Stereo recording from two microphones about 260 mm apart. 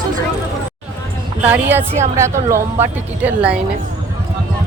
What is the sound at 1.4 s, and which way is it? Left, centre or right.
Speech, centre.